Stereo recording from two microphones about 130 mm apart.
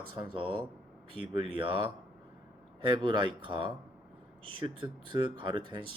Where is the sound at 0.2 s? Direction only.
40° right (ahead or behind).